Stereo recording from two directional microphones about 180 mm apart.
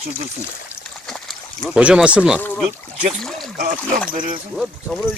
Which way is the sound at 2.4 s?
10° left (ahead or behind).